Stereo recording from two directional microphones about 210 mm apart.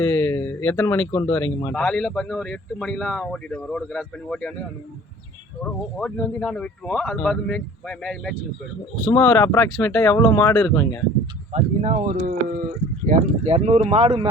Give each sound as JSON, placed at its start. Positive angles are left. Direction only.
{"t": 0.0, "sound": "a sound", "side_deg": 10}
{"t": 1.1, "sound": "speech", "side_deg": 10}
{"t": 5.6, "sound": "speech", "side_deg": 5}
{"t": 11.5, "sound": "speech", "side_deg": -30}